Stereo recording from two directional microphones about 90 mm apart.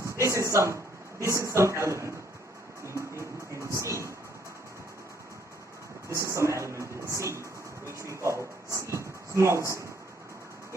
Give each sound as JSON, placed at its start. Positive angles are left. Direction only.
{"t": 0.0, "sound": "a sound", "side_deg": -35}
{"t": 1.2, "sound": "speech", "side_deg": -35}
{"t": 3.2, "sound": "speech", "side_deg": -30}
{"t": 6.1, "sound": "speech", "side_deg": -35}